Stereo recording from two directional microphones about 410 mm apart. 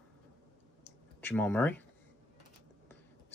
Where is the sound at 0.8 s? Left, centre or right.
Centre.